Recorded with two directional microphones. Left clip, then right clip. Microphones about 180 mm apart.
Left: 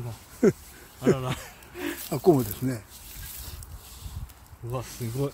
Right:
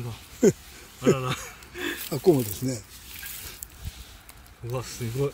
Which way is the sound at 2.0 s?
20° left (ahead or behind).